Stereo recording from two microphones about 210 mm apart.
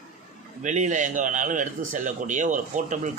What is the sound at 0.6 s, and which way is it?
A man's voice, 35° right (ahead or behind).